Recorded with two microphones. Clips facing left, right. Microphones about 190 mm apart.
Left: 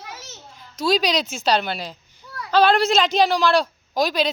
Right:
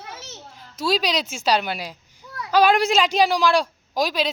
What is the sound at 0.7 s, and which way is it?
A child's voice, 5° right (ahead or behind).